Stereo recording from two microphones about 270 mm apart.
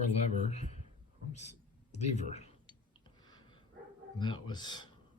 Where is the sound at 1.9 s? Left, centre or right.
Left.